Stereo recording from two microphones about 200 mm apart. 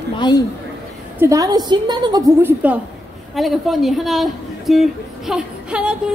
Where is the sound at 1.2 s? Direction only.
15° right (ahead or behind).